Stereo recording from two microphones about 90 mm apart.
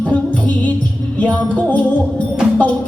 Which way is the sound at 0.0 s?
15° left (ahead or behind).